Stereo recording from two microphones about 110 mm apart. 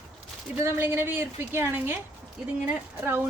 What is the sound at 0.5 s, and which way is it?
A woman's voice, 20° right (ahead or behind).